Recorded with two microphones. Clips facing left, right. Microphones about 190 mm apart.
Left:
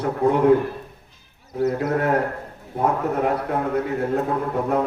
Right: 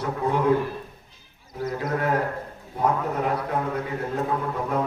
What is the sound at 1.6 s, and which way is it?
A man's voice, 60° left (ahead or behind).